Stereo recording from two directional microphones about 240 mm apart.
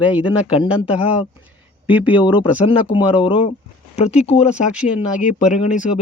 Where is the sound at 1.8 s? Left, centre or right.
Centre.